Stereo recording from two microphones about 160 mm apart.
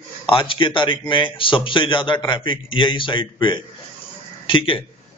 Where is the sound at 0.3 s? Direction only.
30° left (ahead or behind).